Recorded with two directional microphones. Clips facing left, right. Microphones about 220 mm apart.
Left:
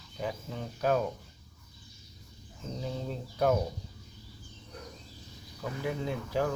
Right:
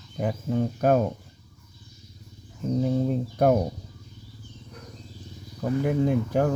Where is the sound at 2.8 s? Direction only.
50° right (ahead or behind).